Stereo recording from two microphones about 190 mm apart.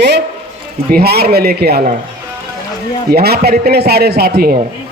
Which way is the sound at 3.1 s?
55° right (ahead or behind).